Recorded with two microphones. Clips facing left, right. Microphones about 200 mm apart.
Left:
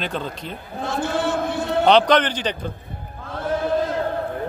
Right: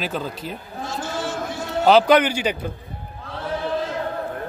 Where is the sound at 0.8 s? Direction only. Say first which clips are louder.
Left 5 dB; 60° left (ahead or behind).